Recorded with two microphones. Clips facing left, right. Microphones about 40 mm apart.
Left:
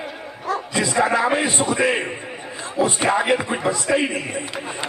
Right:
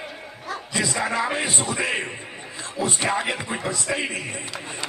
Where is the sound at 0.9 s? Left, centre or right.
Centre.